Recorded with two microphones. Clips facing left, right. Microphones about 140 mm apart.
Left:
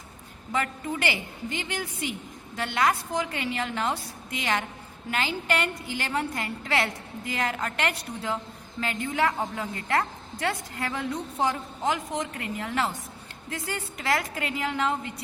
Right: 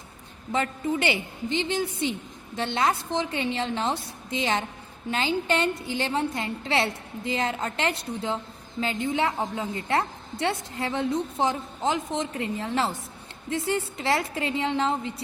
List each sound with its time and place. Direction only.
0.5 s a woman's voice: 25° right (ahead or behind)